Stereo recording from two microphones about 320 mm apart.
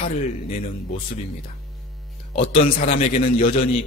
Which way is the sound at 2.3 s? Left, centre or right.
Left.